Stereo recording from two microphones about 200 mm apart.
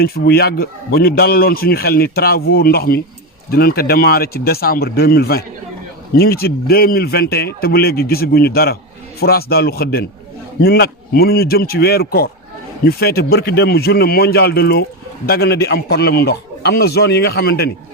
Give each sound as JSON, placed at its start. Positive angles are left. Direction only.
{"t": 0.0, "sound": "a man's voice", "side_deg": 50}